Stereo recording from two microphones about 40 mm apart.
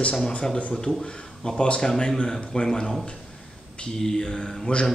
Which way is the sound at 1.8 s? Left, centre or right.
Centre.